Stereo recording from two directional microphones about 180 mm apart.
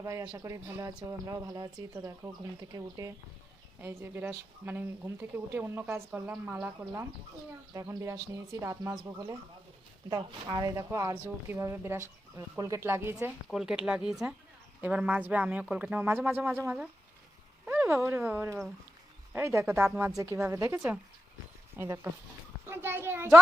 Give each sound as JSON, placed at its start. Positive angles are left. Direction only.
{"t": 0.0, "sound": "a child's voice", "side_deg": -20}